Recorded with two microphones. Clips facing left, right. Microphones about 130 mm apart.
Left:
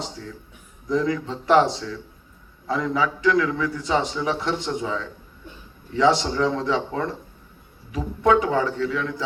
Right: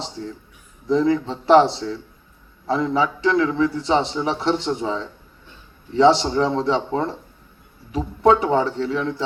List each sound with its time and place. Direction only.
0.0 s a man's voice: 30° right (ahead or behind)